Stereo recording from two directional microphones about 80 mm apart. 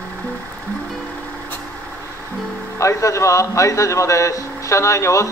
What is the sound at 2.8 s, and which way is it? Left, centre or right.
A man's voice, left.